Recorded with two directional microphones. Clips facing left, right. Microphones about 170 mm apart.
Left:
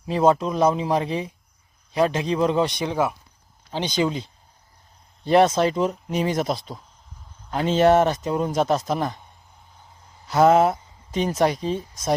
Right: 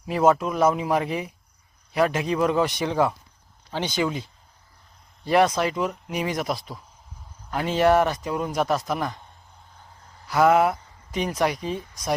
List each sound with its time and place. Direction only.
0.0 s speech: 25° left (ahead or behind)
10.2 s speech: 25° left (ahead or behind)